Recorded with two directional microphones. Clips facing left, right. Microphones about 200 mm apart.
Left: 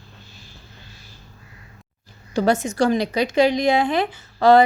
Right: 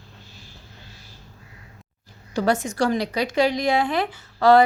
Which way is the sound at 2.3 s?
25° left (ahead or behind).